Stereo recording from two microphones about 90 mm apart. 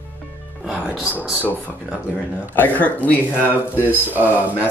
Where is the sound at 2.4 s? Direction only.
20° left (ahead or behind).